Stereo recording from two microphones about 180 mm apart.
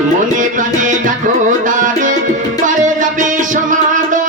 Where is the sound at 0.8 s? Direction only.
45° right (ahead or behind).